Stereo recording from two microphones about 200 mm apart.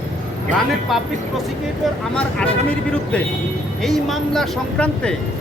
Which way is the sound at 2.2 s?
5° left (ahead or behind).